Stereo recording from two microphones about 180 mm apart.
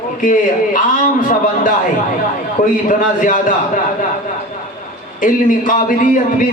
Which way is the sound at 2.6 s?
50° left (ahead or behind).